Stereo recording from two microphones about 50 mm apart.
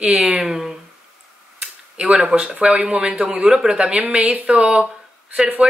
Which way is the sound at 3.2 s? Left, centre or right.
Right.